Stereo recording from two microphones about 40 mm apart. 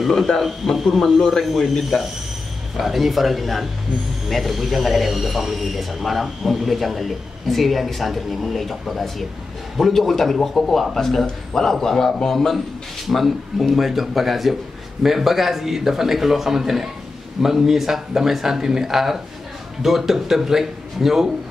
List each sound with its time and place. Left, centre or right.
0.2 s a man's voice: centre